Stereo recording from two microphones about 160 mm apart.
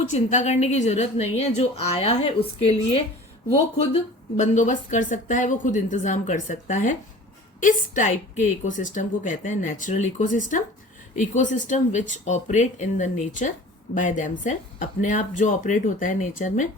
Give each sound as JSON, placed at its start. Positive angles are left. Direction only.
{"t": 0.1, "sound": "a woman's voice", "side_deg": 50}